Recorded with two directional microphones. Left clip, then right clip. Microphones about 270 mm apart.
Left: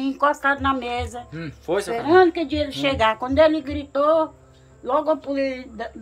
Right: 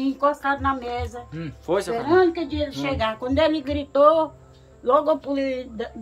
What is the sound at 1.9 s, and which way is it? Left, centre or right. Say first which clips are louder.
A woman's voice: left 4 dB; left.